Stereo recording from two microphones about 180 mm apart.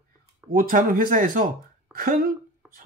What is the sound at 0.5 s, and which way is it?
Speech, 50° right (ahead or behind).